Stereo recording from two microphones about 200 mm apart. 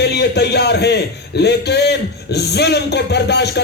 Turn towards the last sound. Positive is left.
turn(degrees=55)  # may be behind; listen again after turning